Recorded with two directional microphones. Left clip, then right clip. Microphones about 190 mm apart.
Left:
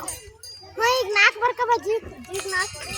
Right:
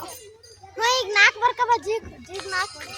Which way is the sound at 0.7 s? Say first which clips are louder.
Even; 20° left (ahead or behind).